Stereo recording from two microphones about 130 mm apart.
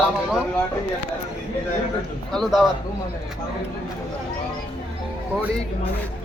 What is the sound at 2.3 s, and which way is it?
Speech, centre (ahead or behind).